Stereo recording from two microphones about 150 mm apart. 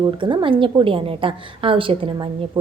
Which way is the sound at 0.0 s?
30° right (ahead or behind).